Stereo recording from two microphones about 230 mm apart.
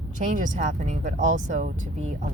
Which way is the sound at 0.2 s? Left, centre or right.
Right.